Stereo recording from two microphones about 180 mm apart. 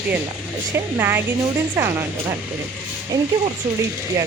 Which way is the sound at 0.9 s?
15° right (ahead or behind).